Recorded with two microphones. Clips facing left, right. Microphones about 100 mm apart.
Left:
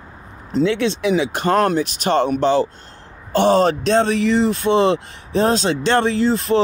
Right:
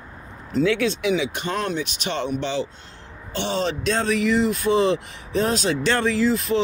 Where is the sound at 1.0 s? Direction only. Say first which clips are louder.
Left 5 dB; 40° left (ahead or behind).